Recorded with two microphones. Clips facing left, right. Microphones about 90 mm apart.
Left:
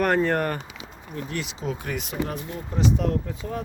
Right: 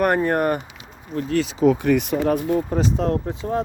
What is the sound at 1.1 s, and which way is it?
Speech, 40° right (ahead or behind).